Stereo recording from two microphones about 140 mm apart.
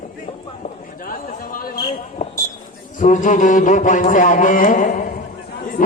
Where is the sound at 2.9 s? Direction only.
65° left (ahead or behind).